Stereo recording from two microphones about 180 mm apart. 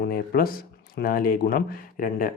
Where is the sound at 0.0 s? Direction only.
55° left (ahead or behind).